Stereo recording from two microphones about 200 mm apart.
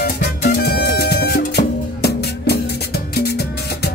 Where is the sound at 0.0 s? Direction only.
55° left (ahead or behind).